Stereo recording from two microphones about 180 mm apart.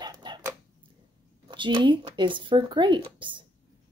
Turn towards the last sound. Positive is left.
turn(degrees=-25)  # may be behind; listen again after turning